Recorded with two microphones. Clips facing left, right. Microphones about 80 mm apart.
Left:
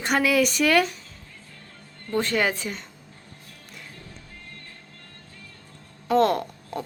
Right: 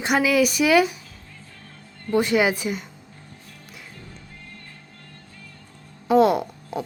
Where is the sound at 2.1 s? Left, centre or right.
Centre.